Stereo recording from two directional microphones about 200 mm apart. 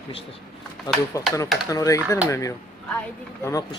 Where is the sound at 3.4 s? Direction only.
15° left (ahead or behind).